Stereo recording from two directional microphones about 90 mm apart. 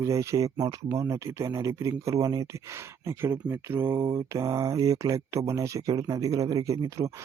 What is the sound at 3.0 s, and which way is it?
Speech, 25° right (ahead or behind).